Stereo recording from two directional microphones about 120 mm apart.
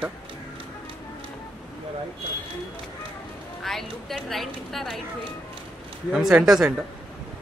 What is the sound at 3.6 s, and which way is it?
A woman's voice, centre (ahead or behind).